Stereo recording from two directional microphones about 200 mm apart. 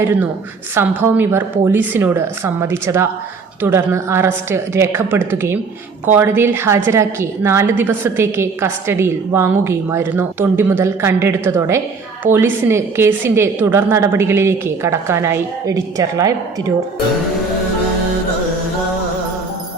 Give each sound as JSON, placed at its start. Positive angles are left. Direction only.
{"t": 0.0, "sound": "a woman's voice", "side_deg": -10}